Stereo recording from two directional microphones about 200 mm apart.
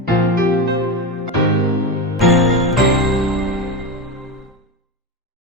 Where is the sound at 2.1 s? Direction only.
Centre (ahead or behind).